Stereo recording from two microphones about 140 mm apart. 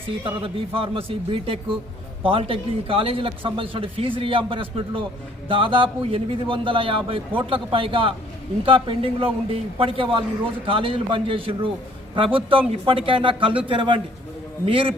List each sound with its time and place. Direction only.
0.3 s a man's voice: 40° right (ahead or behind)